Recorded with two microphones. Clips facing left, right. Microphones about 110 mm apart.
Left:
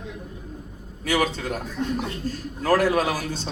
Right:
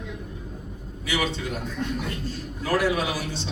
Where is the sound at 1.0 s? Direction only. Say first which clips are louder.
Left 4 dB; 45° left (ahead or behind).